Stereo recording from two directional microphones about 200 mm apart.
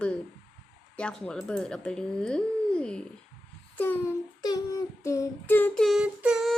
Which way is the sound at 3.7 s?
10° left (ahead or behind).